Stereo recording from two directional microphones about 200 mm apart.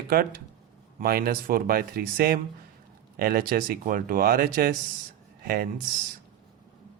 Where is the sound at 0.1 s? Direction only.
50° right (ahead or behind).